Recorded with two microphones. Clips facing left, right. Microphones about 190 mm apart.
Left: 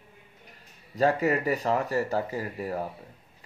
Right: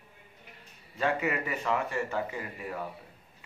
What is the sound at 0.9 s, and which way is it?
Speech, 40° left (ahead or behind).